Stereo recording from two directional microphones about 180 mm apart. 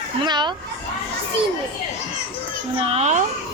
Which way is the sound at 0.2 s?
25° right (ahead or behind).